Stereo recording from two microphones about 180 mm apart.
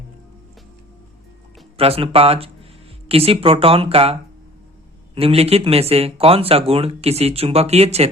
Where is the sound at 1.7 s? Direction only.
35° right (ahead or behind).